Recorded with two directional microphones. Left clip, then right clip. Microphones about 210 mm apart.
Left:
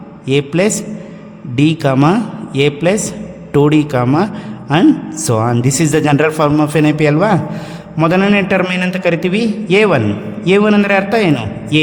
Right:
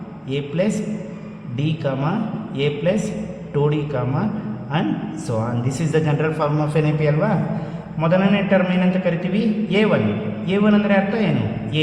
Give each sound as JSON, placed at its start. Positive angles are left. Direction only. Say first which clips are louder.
{"t": 0.3, "sound": "a man's voice", "louder": "left 9 dB", "side_deg": 45}